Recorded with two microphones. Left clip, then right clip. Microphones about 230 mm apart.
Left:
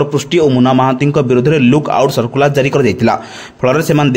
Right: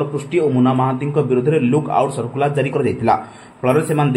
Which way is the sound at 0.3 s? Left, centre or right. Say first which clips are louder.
Left 5 dB; left.